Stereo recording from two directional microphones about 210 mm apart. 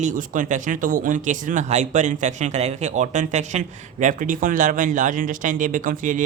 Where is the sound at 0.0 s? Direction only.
40° right (ahead or behind).